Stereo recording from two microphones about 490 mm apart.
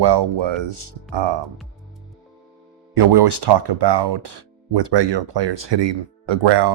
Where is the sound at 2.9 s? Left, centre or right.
Right.